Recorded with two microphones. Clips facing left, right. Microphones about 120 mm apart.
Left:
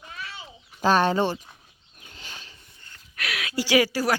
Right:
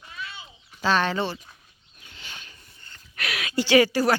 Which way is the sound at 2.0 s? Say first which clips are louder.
Left 1 dB; 40° left (ahead or behind).